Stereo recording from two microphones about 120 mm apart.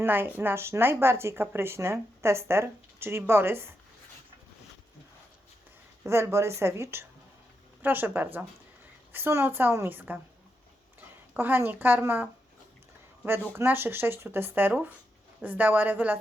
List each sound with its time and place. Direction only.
0.0 s speech: 15° right (ahead or behind)
6.1 s a woman's voice: 25° right (ahead or behind)
11.3 s a woman's voice: 15° right (ahead or behind)